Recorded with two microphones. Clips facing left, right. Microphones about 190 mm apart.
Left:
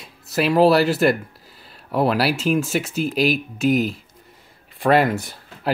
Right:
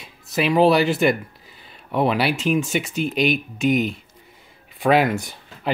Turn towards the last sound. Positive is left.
turn(degrees=0)  # may be behind; listen again after turning